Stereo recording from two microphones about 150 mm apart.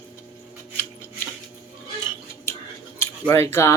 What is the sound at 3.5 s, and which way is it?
Speech, 20° left (ahead or behind).